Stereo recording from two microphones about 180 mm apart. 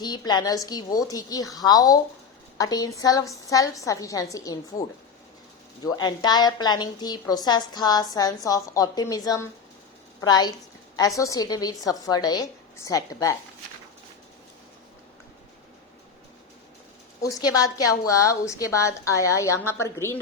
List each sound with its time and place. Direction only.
0.0 s a woman's voice: 25° left (ahead or behind)
5.8 s a woman's voice: 20° left (ahead or behind)
17.2 s a woman's voice: 20° left (ahead or behind)